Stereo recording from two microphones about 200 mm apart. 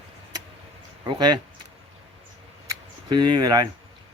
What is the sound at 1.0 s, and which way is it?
Speech, 20° right (ahead or behind).